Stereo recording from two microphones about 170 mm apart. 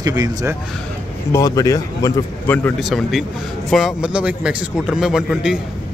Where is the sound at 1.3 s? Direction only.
20° left (ahead or behind).